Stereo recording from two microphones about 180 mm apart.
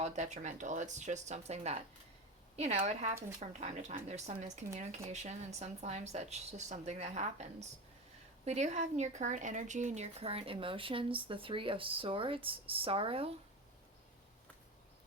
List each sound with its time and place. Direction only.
0.0 s speech: 40° right (ahead or behind)
2.8 s speech: 35° right (ahead or behind)